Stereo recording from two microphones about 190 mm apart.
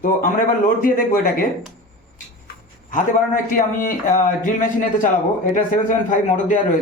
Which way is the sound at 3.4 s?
45° left (ahead or behind).